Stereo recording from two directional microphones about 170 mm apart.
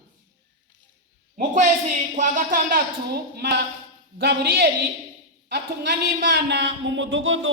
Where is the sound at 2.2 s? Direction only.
50° right (ahead or behind).